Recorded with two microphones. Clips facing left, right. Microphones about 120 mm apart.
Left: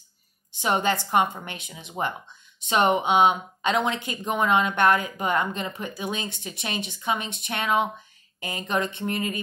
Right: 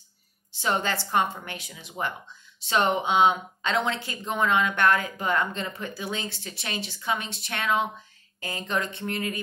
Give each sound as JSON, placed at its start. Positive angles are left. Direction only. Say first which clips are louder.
{"t": 0.5, "sound": "speech", "louder": "left 3 dB", "side_deg": 20}